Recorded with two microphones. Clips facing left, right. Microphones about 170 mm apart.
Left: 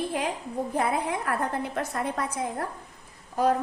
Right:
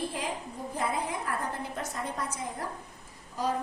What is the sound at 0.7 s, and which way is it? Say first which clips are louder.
A woman's voice: left 4 dB; 60° left (ahead or behind).